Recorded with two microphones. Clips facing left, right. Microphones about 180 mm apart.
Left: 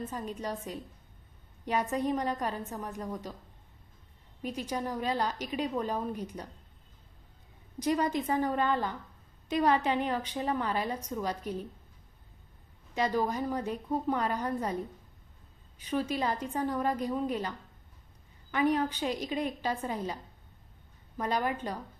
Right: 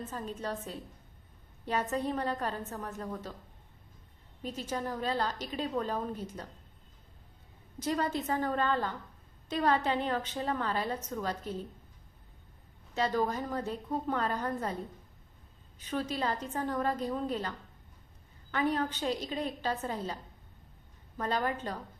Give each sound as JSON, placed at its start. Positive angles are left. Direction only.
{"t": 0.0, "sound": "a woman's voice", "side_deg": 10}
{"t": 4.4, "sound": "a woman's voice", "side_deg": 10}
{"t": 7.8, "sound": "a woman's voice", "side_deg": 15}
{"t": 12.9, "sound": "a woman's voice", "side_deg": 10}
{"t": 15.8, "sound": "a woman's voice", "side_deg": 10}
{"t": 18.5, "sound": "a woman's voice", "side_deg": 10}
{"t": 21.2, "sound": "a woman's voice", "side_deg": 10}